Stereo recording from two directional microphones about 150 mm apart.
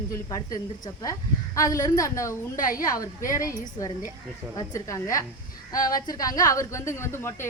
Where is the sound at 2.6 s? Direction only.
65° left (ahead or behind).